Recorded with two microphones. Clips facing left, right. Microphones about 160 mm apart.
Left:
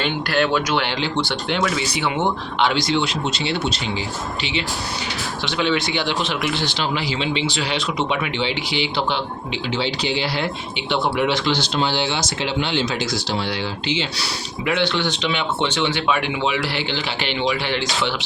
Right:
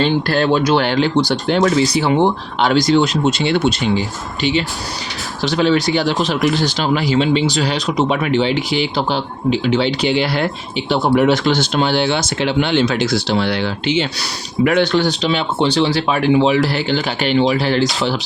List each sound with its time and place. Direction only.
0.0 s speech: 35° right (ahead or behind); by 4.0 s 55° right (ahead or behind)
5.5 s speech: 40° right (ahead or behind)
9.7 s speech: 55° right (ahead or behind); by 18.1 s 40° right (ahead or behind)